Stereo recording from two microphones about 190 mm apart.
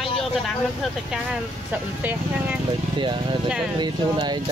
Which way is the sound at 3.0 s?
25° right (ahead or behind).